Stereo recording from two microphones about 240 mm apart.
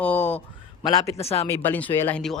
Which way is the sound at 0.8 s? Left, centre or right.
Left.